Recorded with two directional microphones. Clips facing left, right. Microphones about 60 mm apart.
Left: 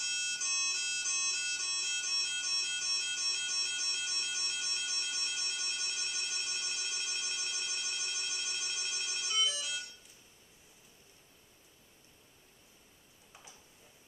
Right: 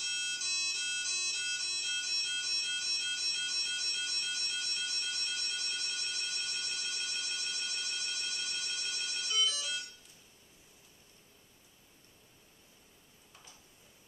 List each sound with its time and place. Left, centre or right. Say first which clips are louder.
0.0 s music: even; centre